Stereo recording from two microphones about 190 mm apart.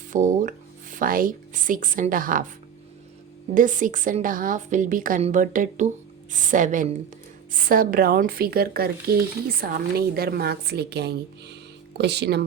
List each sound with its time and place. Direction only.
0.1 s speech: 45° right (ahead or behind)
3.5 s a woman's voice: 45° right (ahead or behind); by 12.4 s 60° right (ahead or behind)